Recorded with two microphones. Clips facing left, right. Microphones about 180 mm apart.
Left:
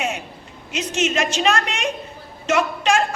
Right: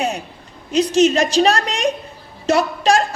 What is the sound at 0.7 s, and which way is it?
A woman's voice, 35° right (ahead or behind).